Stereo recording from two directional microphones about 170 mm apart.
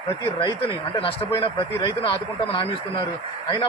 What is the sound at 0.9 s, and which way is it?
A man's voice, 30° left (ahead or behind).